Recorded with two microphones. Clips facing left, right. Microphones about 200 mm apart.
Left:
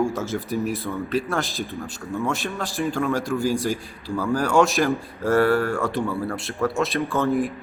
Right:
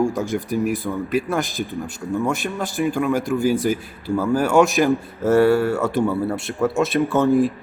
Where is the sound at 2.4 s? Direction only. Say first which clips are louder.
Right 4 dB; centre (ahead or behind).